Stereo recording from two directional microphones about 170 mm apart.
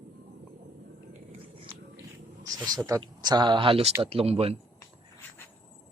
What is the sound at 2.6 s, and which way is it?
Speech, 20° right (ahead or behind).